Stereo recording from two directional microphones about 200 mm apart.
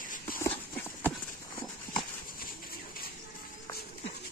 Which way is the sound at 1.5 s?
25° left (ahead or behind).